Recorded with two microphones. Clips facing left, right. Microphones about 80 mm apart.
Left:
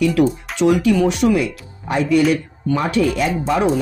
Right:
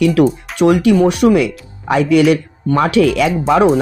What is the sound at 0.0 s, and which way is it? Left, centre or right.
Speech, right.